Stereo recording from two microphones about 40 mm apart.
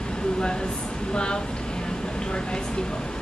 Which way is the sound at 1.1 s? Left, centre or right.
Left.